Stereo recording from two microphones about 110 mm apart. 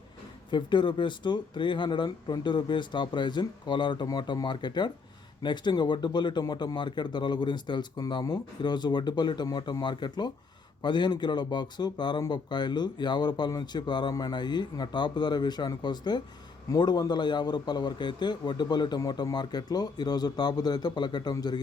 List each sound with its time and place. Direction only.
0.5 s a man's voice: 45° left (ahead or behind)